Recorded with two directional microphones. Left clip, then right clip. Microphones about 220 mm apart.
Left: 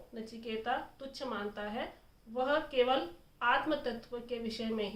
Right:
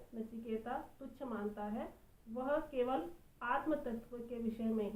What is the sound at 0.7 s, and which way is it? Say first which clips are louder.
A woman's voice: left 8 dB; 20° left (ahead or behind).